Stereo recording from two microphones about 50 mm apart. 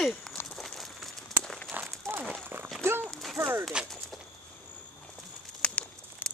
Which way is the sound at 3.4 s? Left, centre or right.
Right.